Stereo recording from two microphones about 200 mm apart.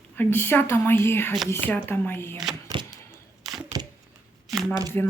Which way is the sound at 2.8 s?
25° right (ahead or behind).